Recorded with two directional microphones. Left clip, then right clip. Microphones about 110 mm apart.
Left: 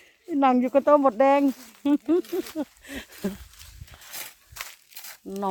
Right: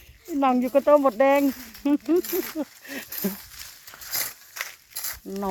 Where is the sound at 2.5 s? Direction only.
40° left (ahead or behind).